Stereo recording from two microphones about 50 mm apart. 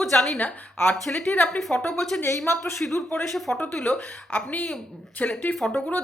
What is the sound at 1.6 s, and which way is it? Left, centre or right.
Speech, centre.